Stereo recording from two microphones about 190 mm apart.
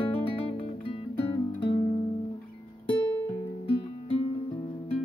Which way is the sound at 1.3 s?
25° left (ahead or behind).